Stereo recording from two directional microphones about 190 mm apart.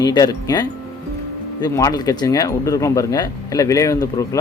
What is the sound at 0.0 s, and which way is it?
Speech, 20° left (ahead or behind).